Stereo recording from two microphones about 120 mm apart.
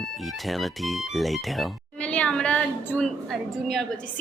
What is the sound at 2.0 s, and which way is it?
A woman's voice, 10° left (ahead or behind).